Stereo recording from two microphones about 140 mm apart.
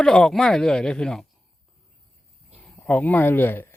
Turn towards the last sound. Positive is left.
turn(degrees=15)  # may be behind; listen again after turning